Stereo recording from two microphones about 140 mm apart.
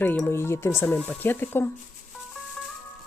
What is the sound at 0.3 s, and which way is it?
Speech, 15° left (ahead or behind).